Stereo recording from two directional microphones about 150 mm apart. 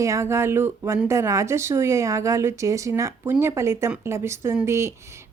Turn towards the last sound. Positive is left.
turn(degrees=-20)  # may be behind; listen again after turning